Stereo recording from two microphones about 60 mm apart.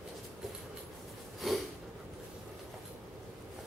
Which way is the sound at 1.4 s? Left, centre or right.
Centre.